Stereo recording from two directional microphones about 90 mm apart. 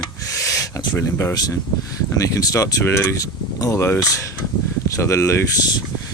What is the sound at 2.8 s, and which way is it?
Speech, 30° left (ahead or behind).